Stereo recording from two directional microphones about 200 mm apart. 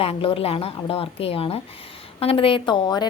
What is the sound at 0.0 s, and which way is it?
A woman's voice, 30° left (ahead or behind).